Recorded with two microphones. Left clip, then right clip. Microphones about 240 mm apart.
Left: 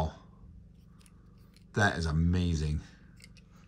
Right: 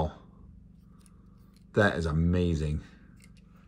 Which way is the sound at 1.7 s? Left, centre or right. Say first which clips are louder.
Right 3 dB; centre.